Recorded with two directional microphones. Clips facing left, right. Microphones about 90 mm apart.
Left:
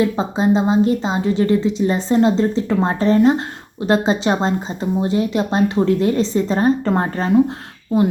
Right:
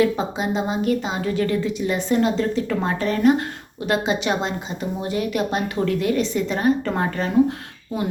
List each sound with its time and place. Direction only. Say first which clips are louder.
0.0 s a woman's voice: left 3 dB; 30° left (ahead or behind)